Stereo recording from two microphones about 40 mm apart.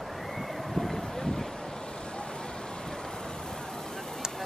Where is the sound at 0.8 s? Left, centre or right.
Centre.